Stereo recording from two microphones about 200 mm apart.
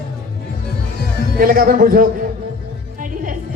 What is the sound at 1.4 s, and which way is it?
Speech, 45° right (ahead or behind).